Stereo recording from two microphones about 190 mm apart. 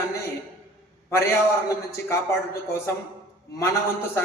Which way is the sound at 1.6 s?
15° left (ahead or behind).